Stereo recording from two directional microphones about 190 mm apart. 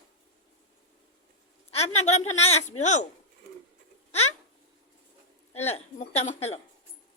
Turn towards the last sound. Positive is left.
turn(degrees=35)  # may be behind; listen again after turning